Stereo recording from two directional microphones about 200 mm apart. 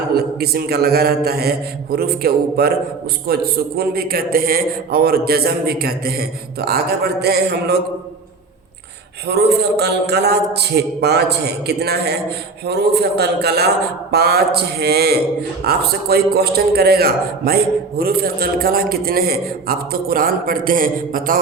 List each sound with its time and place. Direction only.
0.1 s a man's voice: 50° right (ahead or behind)
9.2 s a man's voice: 55° right (ahead or behind)